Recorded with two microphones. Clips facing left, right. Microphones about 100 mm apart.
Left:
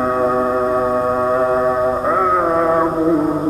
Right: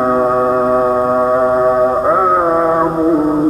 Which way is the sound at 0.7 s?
5° right (ahead or behind).